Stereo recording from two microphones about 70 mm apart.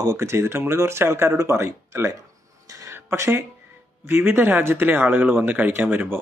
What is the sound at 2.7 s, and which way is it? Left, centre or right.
Music, right.